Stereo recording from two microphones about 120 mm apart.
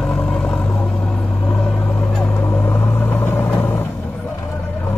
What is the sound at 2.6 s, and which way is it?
Vehicle, 15° left (ahead or behind).